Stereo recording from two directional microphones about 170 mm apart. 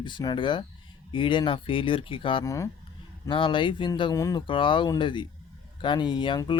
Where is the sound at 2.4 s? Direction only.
20° left (ahead or behind).